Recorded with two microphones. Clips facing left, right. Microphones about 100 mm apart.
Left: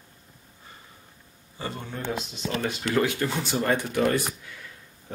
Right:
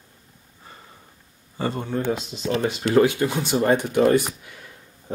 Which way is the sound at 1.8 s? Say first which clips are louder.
Right 5 dB; 25° right (ahead or behind).